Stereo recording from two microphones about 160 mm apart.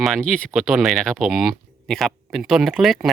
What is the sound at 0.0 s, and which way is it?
Speech, 5° left (ahead or behind).